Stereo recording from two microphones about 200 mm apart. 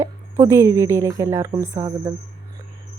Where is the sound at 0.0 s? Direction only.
15° right (ahead or behind).